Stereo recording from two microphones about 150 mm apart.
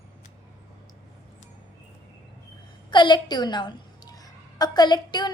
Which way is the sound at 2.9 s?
30° left (ahead or behind).